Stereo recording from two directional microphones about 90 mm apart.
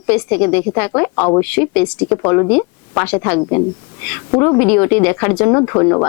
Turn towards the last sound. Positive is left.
turn(degrees=25)  # may be behind; listen again after turning